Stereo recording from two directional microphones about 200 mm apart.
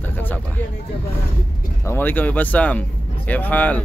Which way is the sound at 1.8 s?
10° left (ahead or behind).